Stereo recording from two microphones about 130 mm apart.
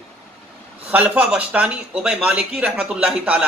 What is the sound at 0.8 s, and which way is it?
Speech, 10° right (ahead or behind).